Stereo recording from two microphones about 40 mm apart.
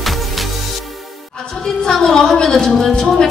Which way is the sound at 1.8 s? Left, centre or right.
Centre.